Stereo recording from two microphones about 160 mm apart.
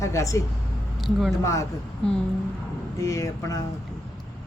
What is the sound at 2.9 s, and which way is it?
Speech, 20° left (ahead or behind).